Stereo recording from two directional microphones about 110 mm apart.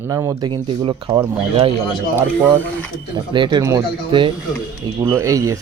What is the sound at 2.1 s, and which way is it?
Speech, 20° right (ahead or behind).